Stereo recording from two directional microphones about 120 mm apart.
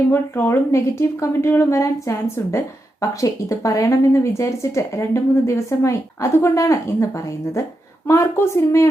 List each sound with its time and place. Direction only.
0.1 s a woman's voice: 20° left (ahead or behind)